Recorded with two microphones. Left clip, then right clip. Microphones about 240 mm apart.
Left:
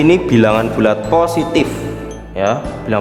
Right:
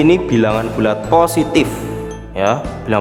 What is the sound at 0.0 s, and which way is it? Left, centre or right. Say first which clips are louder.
Speech: left 1 dB; centre.